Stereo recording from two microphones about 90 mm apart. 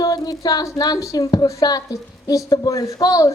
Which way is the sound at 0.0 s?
45° left (ahead or behind).